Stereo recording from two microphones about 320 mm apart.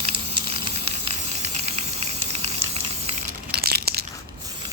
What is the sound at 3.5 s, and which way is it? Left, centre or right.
Crushing, right.